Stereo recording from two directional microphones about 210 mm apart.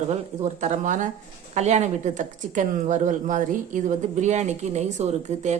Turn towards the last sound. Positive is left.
turn(degrees=-35)  # may be behind; listen again after turning